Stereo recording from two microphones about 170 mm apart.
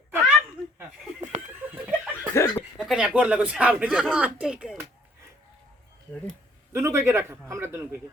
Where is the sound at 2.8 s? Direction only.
5° right (ahead or behind).